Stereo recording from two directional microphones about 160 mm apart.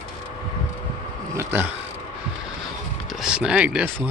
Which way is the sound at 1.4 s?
10° right (ahead or behind).